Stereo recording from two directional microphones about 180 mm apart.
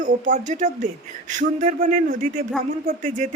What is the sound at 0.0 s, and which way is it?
A woman's voice, 45° right (ahead or behind).